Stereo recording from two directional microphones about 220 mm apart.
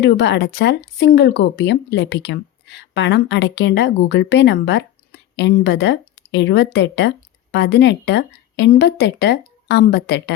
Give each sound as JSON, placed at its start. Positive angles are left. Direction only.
{"t": 0.0, "sound": "speech", "side_deg": 50}